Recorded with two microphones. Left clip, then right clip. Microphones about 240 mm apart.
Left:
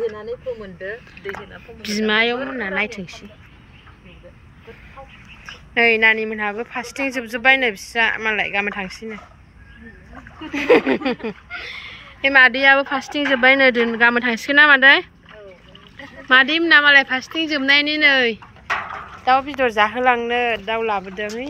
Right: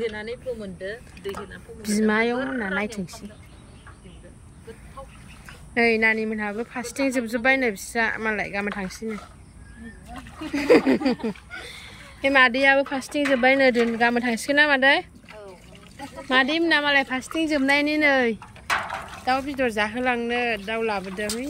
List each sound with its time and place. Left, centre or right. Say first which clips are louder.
1.8 s speech: left 4 dB; centre
5.8 s speech: left 5 dB; centre
10.5 s speech: left 3 dB; centre
16.3 s speech: left 7 dB; centre